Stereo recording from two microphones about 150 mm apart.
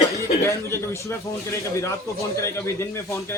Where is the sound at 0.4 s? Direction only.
20° left (ahead or behind).